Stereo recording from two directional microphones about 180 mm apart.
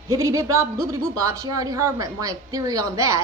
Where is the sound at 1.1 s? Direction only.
20° right (ahead or behind).